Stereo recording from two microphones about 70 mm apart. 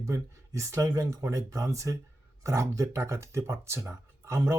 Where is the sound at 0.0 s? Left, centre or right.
Right.